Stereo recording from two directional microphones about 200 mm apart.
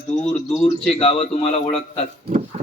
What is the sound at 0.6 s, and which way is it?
Speech, 30° left (ahead or behind).